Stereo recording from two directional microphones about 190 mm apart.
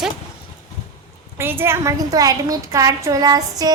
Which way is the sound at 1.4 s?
10° right (ahead or behind).